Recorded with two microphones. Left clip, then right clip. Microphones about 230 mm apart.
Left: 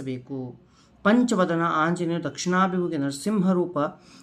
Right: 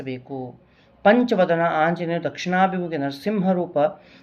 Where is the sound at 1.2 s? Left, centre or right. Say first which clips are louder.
Right 4 dB; centre.